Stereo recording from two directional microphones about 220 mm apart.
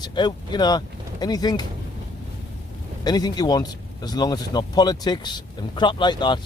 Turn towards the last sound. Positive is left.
turn(degrees=20)  # may be behind; listen again after turning